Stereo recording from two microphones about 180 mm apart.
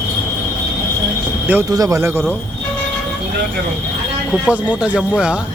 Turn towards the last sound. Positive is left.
turn(degrees=-5)  # may be behind; listen again after turning